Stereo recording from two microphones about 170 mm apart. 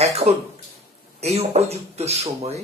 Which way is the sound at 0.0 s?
40° right (ahead or behind).